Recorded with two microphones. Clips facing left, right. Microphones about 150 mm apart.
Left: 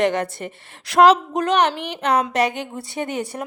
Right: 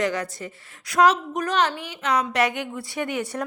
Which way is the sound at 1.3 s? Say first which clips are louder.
Left 6 dB; 30° left (ahead or behind).